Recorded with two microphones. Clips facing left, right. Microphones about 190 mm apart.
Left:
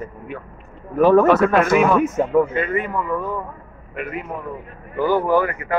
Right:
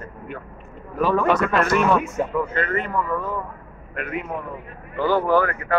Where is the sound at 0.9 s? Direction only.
50° left (ahead or behind).